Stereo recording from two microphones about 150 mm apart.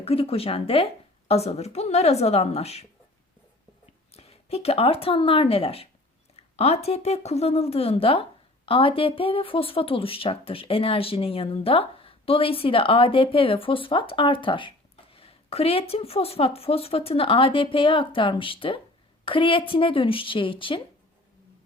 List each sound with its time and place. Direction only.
0.0 s a woman's voice: 40° left (ahead or behind)
4.1 s speech: 45° left (ahead or behind)